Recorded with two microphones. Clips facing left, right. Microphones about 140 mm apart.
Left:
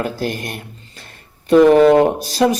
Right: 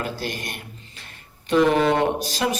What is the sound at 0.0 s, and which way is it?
Speech, 45° left (ahead or behind).